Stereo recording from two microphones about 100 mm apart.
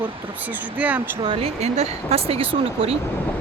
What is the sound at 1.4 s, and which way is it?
Speech, 90° right.